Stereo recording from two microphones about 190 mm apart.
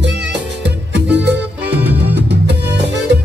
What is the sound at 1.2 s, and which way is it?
Music, 60° right (ahead or behind).